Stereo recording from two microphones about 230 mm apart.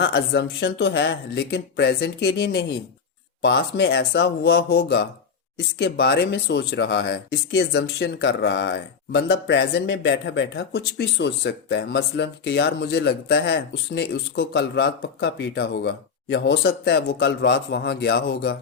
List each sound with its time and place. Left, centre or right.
0.0 s speech: left